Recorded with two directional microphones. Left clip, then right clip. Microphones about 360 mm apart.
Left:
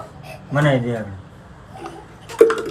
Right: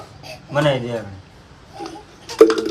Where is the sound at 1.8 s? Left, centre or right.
Right.